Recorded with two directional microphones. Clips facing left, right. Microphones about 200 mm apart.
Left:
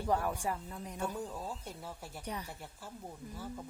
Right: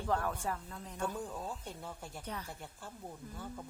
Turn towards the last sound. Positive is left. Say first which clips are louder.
# left 2 dB
turn(degrees=5)  # may be behind; listen again after turning